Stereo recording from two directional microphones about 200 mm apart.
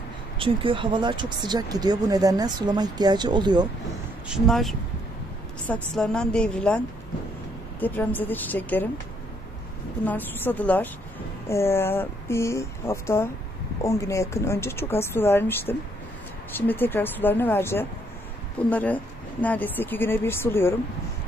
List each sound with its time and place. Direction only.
0.4 s speech: 25° right (ahead or behind)
4.3 s a woman's voice: centre (ahead or behind)
7.8 s speech: 10° left (ahead or behind)
10.0 s speech: 10° left (ahead or behind)